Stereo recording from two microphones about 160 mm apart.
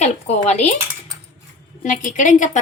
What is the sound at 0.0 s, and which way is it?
Speech, 45° left (ahead or behind).